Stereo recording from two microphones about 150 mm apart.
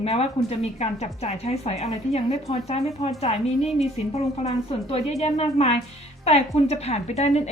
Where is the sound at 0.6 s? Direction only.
45° left (ahead or behind).